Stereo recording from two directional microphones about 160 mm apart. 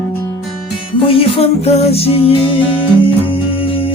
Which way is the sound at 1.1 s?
35° left (ahead or behind).